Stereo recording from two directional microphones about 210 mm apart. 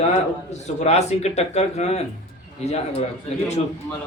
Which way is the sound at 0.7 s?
30° left (ahead or behind).